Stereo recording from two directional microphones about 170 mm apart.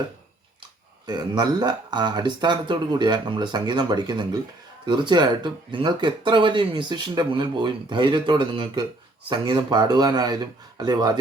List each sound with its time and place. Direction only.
1.0 s speech: 25° right (ahead or behind)